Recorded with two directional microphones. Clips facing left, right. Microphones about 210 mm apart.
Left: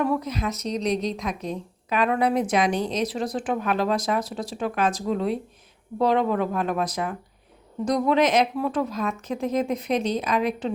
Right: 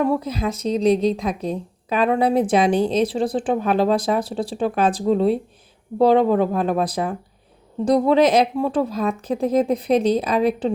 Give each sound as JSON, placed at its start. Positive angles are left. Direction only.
{"t": 0.0, "sound": "speech", "side_deg": -25}